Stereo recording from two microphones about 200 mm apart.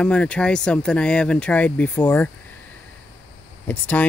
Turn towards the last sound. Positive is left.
turn(degrees=10)  # may be behind; listen again after turning